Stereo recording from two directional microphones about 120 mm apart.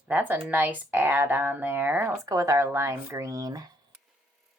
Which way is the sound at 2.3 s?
25° right (ahead or behind).